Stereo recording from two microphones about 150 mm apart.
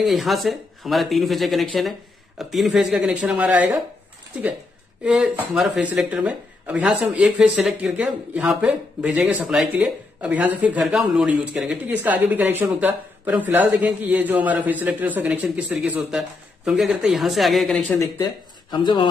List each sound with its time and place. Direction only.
0.0 s speech: centre (ahead or behind)
5.0 s speech: 5° right (ahead or behind)
18.7 s speech: 30° left (ahead or behind)